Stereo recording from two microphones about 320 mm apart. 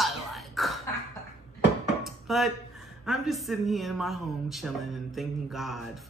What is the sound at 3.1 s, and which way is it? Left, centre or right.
Speech, centre.